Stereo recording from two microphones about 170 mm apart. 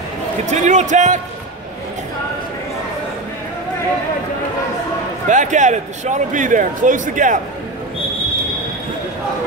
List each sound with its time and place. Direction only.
0.5 s a man's voice: 45° right (ahead or behind)
5.3 s a man's voice: 45° right (ahead or behind)